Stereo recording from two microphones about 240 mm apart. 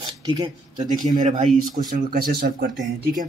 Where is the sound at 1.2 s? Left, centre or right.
Right.